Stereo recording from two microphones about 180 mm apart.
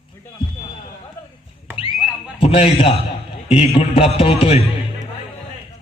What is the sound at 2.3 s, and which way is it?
A man's voice, 30° left (ahead or behind).